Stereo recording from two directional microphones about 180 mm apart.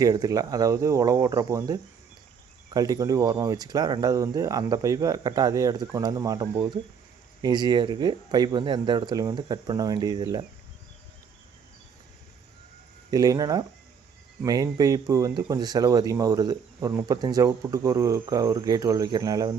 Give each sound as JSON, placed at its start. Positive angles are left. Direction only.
{"t": 0.0, "sound": "speech", "side_deg": -20}
{"t": 13.1, "sound": "speech", "side_deg": -20}